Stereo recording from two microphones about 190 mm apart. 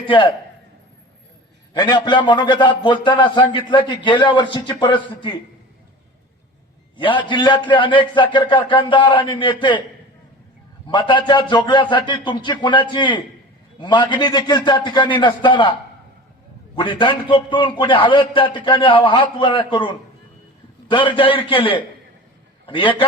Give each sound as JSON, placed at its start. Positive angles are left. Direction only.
{"t": 0.0, "sound": "a man's voice", "side_deg": 25}
{"t": 1.7, "sound": "a man's voice", "side_deg": 25}
{"t": 6.9, "sound": "a man's voice", "side_deg": 25}
{"t": 10.8, "sound": "a man's voice", "side_deg": 25}
{"t": 16.7, "sound": "a man's voice", "side_deg": 25}
{"t": 20.9, "sound": "a man's voice", "side_deg": 25}